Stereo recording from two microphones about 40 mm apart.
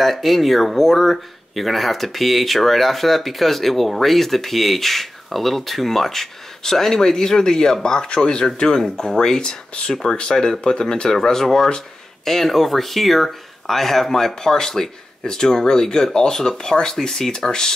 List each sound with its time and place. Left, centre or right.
0.0 s speech: centre